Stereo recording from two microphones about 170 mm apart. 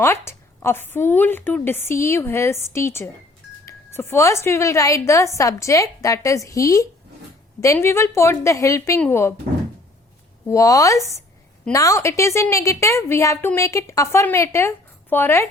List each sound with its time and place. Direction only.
0.0 s a woman's voice: 15° left (ahead or behind)
10.4 s a woman's voice: 20° left (ahead or behind)